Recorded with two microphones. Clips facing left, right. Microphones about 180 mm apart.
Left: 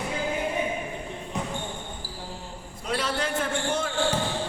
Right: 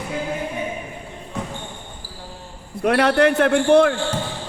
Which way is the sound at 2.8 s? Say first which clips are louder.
Right 13 dB; 65° right (ahead or behind).